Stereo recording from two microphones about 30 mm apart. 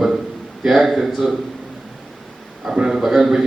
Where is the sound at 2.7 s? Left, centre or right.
Centre.